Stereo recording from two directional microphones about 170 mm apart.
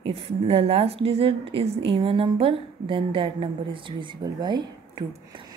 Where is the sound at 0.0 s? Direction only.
35° right (ahead or behind).